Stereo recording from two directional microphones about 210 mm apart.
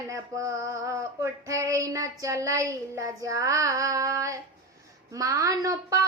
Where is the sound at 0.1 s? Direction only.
15° right (ahead or behind).